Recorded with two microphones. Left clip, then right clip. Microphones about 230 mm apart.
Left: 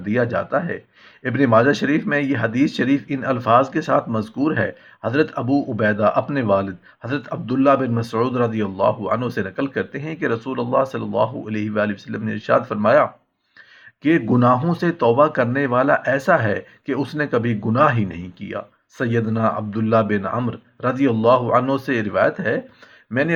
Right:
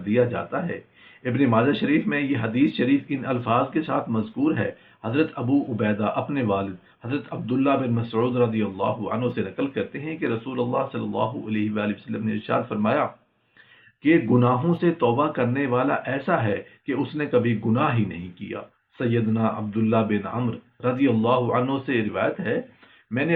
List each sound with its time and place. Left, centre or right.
0.0 s speech: left